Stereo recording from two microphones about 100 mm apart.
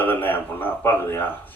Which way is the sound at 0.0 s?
20° left (ahead or behind).